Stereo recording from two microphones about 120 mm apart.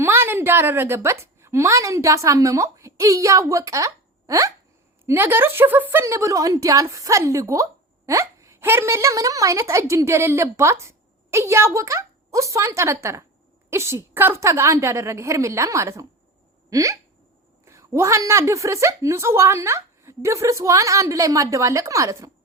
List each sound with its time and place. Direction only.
0.0 s a woman's voice: 20° right (ahead or behind)
16.6 s hiccup: 25° right (ahead or behind)
17.7 s a woman's voice: 25° right (ahead or behind)